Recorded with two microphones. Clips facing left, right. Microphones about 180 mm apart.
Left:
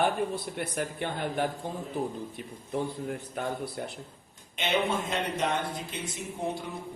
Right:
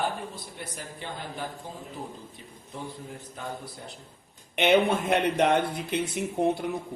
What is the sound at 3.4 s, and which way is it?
Speech, 60° left (ahead or behind).